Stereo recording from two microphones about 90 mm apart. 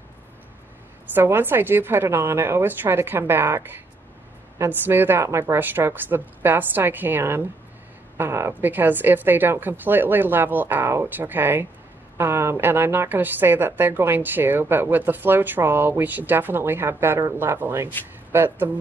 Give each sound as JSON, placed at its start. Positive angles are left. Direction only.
{"t": 1.1, "sound": "a woman's voice", "side_deg": -25}